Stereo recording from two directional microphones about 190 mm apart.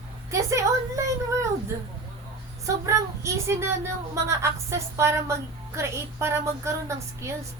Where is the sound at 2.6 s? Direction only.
15° right (ahead or behind).